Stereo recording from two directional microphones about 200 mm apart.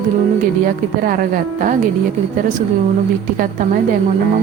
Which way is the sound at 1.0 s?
45° right (ahead or behind).